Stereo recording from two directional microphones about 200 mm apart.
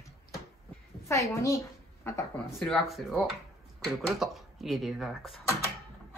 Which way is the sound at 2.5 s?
Centre (ahead or behind).